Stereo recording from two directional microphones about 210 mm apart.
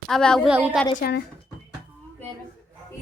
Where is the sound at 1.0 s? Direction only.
45° left (ahead or behind).